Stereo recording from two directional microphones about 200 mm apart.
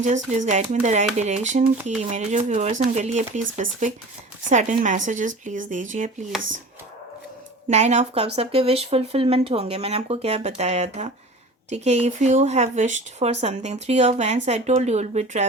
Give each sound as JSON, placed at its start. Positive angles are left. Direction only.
{"t": 0.3, "sound": "speech", "side_deg": -35}
{"t": 7.7, "sound": "speech", "side_deg": -35}